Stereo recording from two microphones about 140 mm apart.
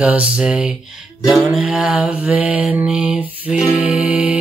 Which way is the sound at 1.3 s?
Centre (ahead or behind).